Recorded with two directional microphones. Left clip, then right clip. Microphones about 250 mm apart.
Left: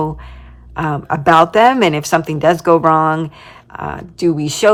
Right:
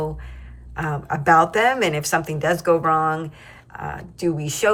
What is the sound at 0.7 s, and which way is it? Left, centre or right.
A woman's voice, centre.